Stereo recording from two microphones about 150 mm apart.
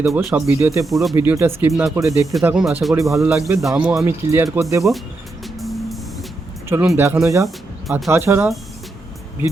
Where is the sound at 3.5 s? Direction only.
5° right (ahead or behind).